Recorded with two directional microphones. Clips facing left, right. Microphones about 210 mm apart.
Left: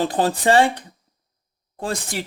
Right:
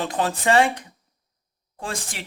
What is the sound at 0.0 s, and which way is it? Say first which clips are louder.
Speech: left 4 dB; 35° left (ahead or behind).